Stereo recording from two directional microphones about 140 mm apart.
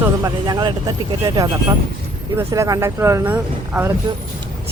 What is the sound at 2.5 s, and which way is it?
Speech, 25° right (ahead or behind).